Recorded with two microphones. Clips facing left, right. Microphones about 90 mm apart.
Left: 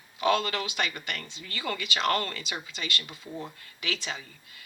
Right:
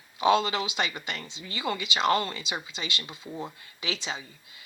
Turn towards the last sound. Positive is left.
turn(degrees=-25)  # may be behind; listen again after turning